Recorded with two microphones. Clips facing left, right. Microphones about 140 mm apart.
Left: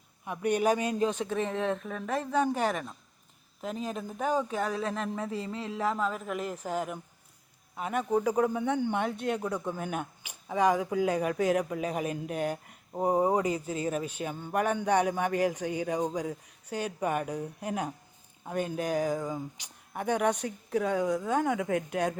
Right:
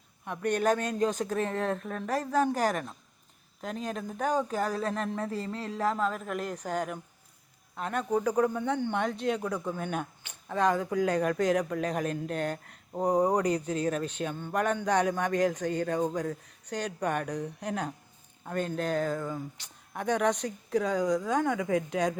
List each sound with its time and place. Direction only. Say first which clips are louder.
0.3 s speech: even; 10° left (ahead or behind)